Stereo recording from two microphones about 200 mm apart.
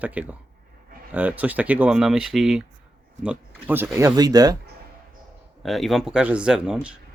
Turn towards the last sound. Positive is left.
turn(degrees=-5)  # may be behind; listen again after turning